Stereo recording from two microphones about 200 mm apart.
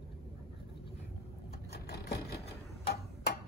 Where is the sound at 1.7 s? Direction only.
50° left (ahead or behind).